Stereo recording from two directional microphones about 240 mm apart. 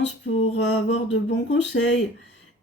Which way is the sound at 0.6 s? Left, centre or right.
Left.